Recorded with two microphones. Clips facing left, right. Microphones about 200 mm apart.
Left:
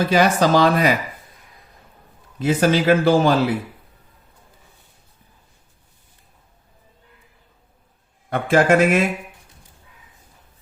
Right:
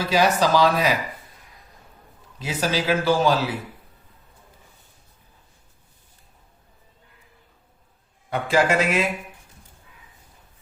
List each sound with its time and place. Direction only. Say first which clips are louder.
0.1 s speech: left 1 dB; 55° left (ahead or behind)
2.4 s speech: left 8 dB; 55° left (ahead or behind)
8.3 s speech: left 5 dB; 55° left (ahead or behind)